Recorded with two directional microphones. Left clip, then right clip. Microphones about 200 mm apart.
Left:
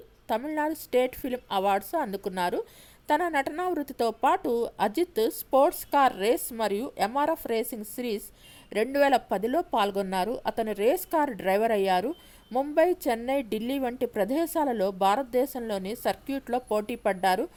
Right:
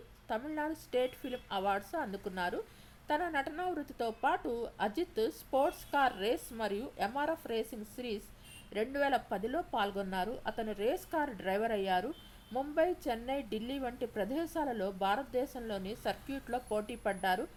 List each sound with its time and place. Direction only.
0.3 s speech: 40° left (ahead or behind)